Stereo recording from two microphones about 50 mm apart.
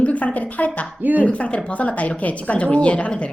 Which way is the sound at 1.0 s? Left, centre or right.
Right.